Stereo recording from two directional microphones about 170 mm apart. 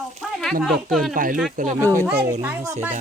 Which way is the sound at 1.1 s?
50° right (ahead or behind).